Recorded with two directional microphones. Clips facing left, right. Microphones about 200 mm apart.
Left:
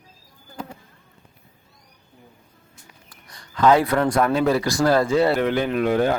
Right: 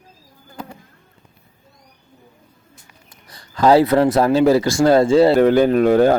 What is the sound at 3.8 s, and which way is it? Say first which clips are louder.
Speech: right 5 dB; 25° right (ahead or behind).